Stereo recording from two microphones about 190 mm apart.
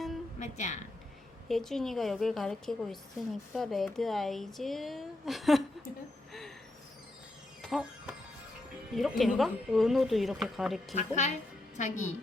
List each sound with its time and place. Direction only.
0.3 s speech: 40° left (ahead or behind)
1.5 s a woman's voice: centre (ahead or behind)
7.7 s music: 5° right (ahead or behind)
8.9 s a woman's voice: centre (ahead or behind)
10.9 s a woman's voice: 40° left (ahead or behind)